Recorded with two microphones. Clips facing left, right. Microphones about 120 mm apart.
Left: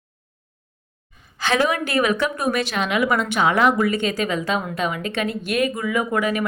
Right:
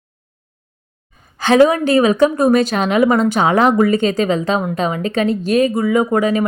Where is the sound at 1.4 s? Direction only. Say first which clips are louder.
Right 9 dB; 35° right (ahead or behind).